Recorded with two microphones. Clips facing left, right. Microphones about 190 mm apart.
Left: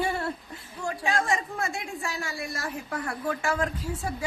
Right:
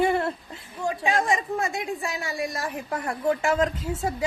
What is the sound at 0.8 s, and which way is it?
A woman's voice, 20° right (ahead or behind).